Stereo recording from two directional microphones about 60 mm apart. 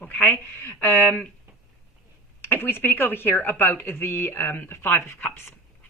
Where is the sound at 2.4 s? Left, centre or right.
Left.